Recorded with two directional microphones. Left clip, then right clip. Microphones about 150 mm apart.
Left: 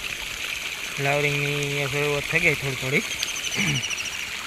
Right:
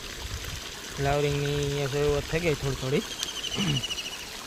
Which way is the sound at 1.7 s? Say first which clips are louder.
Left 2 dB; 5° right (ahead or behind).